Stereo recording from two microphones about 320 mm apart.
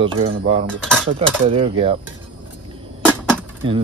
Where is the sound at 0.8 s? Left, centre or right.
Centre.